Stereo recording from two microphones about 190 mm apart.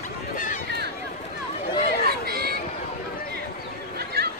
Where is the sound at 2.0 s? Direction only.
55° right (ahead or behind).